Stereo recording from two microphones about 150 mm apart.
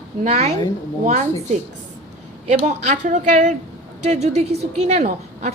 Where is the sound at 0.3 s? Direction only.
45° right (ahead or behind).